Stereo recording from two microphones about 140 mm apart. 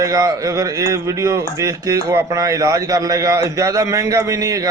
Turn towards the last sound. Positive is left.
turn(degrees=-25)  # may be behind; listen again after turning